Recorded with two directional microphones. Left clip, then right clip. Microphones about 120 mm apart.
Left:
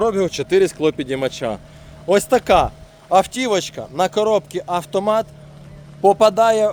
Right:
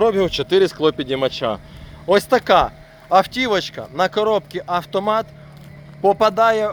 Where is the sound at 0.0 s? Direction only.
10° left (ahead or behind).